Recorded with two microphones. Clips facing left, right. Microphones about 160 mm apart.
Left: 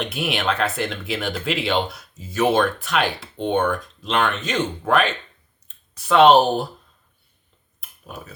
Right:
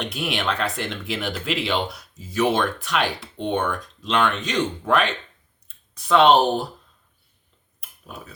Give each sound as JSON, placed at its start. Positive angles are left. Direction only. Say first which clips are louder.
{"t": 0.0, "sound": "speech", "louder": "left 2 dB", "side_deg": 5}
{"t": 7.8, "sound": "tick-tock", "louder": "left 2 dB", "side_deg": 0}